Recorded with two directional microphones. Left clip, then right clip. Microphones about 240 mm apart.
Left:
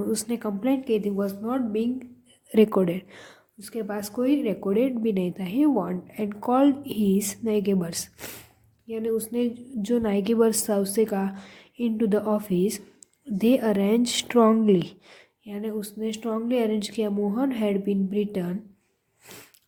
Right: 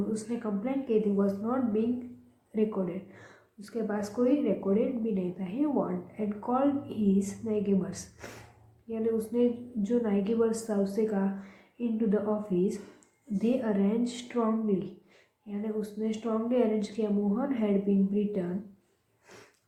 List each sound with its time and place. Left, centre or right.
0.1 s a woman's voice: left